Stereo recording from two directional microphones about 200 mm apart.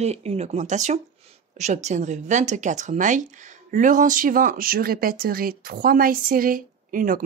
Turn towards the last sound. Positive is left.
turn(degrees=-40)  # may be behind; listen again after turning